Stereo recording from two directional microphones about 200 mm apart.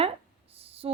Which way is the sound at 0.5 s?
30° right (ahead or behind).